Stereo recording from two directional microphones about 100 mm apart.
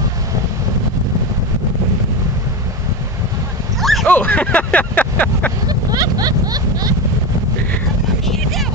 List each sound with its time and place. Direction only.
3.8 s a sound: centre (ahead or behind)
4.1 s speech: 15° left (ahead or behind)
5.7 s speech: 40° right (ahead or behind)
8.3 s vehicle: centre (ahead or behind)